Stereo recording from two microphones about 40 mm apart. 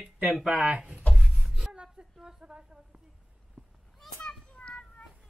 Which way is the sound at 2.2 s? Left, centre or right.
Right.